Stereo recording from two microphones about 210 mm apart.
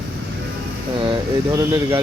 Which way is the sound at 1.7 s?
10° right (ahead or behind).